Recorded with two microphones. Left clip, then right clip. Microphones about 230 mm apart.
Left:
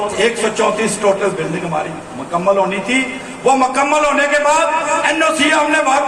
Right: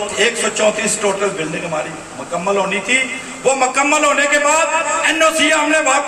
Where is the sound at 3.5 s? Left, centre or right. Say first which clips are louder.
Left 1 dB; right.